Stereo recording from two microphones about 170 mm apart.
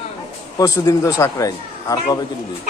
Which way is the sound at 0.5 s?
20° left (ahead or behind).